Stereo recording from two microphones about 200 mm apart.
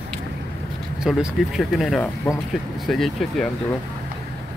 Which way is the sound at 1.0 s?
5° right (ahead or behind).